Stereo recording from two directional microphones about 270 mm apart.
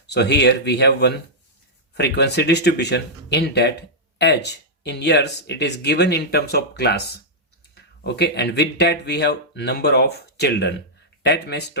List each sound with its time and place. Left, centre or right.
0.1 s speech: left